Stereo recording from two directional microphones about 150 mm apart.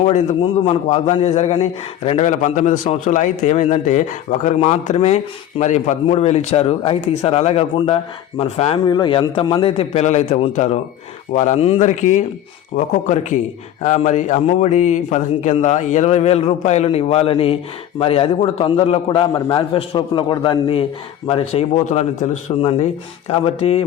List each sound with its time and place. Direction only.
0.4 s a man's voice: 35° left (ahead or behind)
8.9 s a man's voice: 30° left (ahead or behind); by 11.5 s 55° left (ahead or behind)
11.5 s a man's voice: 40° left (ahead or behind)
23.6 s a man's voice: 40° left (ahead or behind)